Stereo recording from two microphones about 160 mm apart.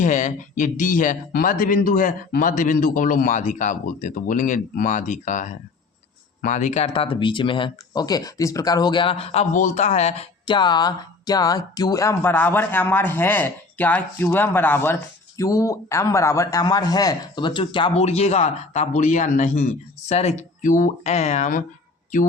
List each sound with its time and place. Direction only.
0.0 s speech: 50° left (ahead or behind)
10.4 s speech: 30° left (ahead or behind); by 21.6 s 45° left (ahead or behind)